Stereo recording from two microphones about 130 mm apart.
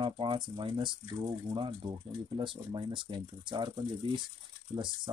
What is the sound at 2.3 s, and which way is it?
Speech, 35° right (ahead or behind).